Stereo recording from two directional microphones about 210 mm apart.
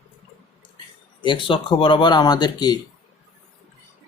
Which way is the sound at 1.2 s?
25° left (ahead or behind).